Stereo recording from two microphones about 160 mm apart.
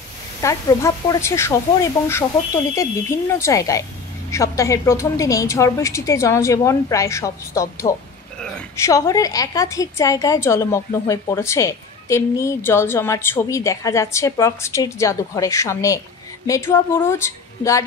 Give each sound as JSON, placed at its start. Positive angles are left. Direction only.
{"t": 0.4, "sound": "a woman's voice", "side_deg": 20}